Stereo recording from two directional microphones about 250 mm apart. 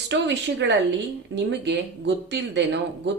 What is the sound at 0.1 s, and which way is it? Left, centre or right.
Speech, right.